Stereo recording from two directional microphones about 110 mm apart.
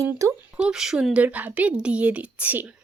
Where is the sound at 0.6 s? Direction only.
5° right (ahead or behind).